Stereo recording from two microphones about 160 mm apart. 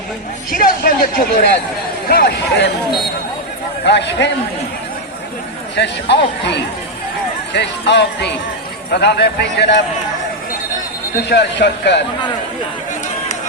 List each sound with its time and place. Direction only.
0.5 s speech: 65° left (ahead or behind)
2.0 s speech: 80° left
3.8 s speech: 90° left
5.7 s speech: 90° left
11.3 s speech: 90° left